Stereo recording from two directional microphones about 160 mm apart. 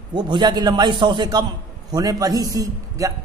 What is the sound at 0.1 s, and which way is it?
Speech, 25° right (ahead or behind).